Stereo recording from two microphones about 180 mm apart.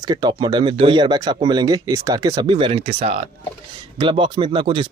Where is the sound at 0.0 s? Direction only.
25° right (ahead or behind).